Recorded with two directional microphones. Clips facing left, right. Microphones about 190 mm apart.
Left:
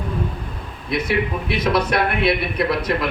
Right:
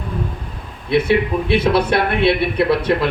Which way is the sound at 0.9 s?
30° right (ahead or behind).